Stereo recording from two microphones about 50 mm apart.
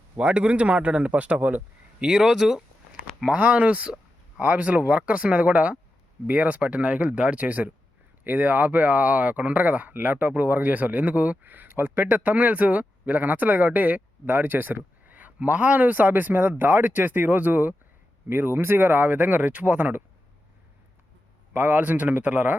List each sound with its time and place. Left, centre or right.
0.2 s speech: right
2.0 s speech: centre
3.2 s speech: right
18.3 s speech: right
21.5 s speech: right